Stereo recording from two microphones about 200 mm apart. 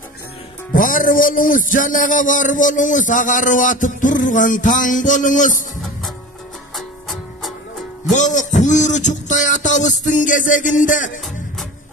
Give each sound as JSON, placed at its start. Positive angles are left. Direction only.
{"t": 0.7, "sound": "speech", "side_deg": 45}
{"t": 6.7, "sound": "music", "side_deg": 0}
{"t": 8.1, "sound": "a sound", "side_deg": 40}